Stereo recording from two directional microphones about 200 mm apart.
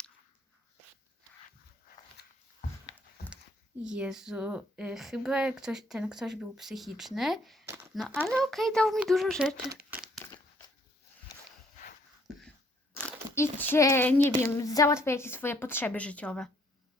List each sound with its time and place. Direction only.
2.2 s a sound: 55° left (ahead or behind)
3.8 s speech: 5° right (ahead or behind)
10.2 s crumpling: 10° left (ahead or behind)
12.3 s cough: 5° right (ahead or behind)
12.9 s a sound: 5° left (ahead or behind)
13.3 s a woman's voice: 10° left (ahead or behind)